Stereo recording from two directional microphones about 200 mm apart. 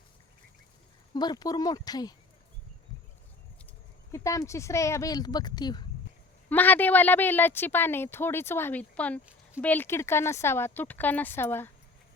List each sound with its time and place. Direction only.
1.1 s speech: 20° left (ahead or behind)
4.1 s a woman's voice: 15° left (ahead or behind)
6.5 s a woman's voice: 10° left (ahead or behind)